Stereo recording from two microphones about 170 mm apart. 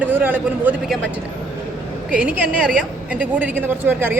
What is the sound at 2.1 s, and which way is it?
A woman's voice, 10° right (ahead or behind).